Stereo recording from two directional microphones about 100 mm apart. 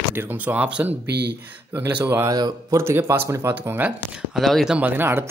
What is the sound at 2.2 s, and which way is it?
Speech, 45° right (ahead or behind).